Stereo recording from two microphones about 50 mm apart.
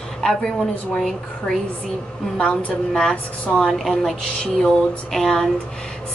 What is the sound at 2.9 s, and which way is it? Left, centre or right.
A woman's voice, centre.